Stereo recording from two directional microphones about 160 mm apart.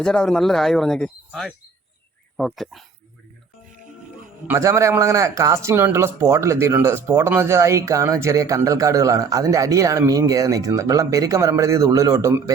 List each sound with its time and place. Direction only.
0.0 s speech: 5° left (ahead or behind)
4.4 s a man's voice: 15° right (ahead or behind)